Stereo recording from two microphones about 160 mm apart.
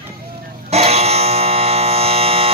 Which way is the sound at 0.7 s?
40° right (ahead or behind).